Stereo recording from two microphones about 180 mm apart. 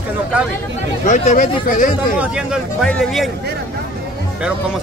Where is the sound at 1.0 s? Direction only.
45° left (ahead or behind).